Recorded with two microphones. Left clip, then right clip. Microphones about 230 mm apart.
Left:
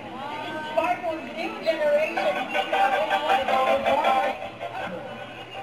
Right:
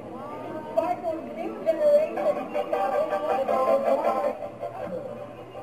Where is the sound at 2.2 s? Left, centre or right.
Centre.